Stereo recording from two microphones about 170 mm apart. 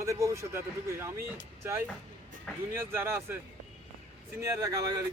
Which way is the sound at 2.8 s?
15° right (ahead or behind).